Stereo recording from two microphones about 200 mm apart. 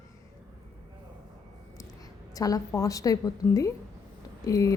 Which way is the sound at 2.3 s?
15° left (ahead or behind).